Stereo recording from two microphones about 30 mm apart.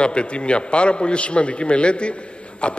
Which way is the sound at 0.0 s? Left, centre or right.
Left.